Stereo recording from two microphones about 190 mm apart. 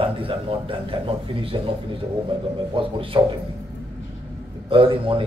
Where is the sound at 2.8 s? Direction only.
25° right (ahead or behind).